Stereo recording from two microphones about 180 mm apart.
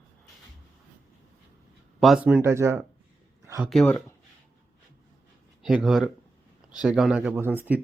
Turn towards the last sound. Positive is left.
turn(degrees=-10)  # may be behind; listen again after turning